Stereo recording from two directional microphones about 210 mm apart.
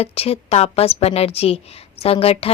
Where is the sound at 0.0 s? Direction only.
30° left (ahead or behind).